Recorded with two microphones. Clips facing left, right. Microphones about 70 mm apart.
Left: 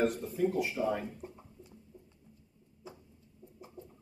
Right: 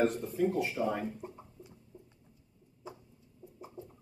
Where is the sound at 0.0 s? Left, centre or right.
Centre.